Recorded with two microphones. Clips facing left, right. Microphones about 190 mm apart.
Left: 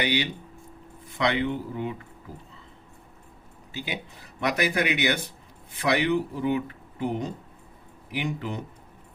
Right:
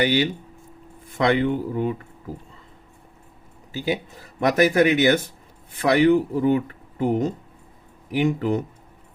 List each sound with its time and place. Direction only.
0.0 s speech: 45° right (ahead or behind)
3.7 s speech: 40° right (ahead or behind)